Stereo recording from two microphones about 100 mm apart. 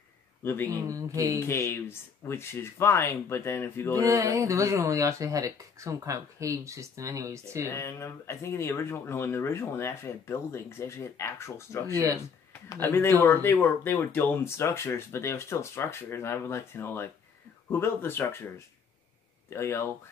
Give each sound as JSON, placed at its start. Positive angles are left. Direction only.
{"t": 0.4, "sound": "speech", "side_deg": 20}
{"t": 0.8, "sound": "speech", "side_deg": -35}
{"t": 1.4, "sound": "speech", "side_deg": 25}
{"t": 3.9, "sound": "speech", "side_deg": -35}
{"t": 7.6, "sound": "speech", "side_deg": 25}
{"t": 19.5, "sound": "speech", "side_deg": 25}